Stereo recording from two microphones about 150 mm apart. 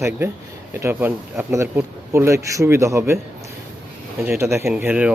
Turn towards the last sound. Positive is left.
turn(degrees=-10)  # may be behind; listen again after turning